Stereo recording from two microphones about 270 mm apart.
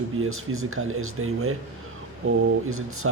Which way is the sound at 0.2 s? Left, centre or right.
Right.